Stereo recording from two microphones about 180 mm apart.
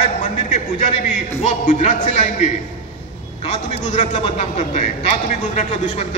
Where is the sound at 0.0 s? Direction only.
40° left (ahead or behind).